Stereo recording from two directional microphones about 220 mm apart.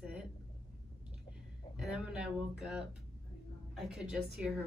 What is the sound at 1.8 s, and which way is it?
A woman's voice, 5° right (ahead or behind).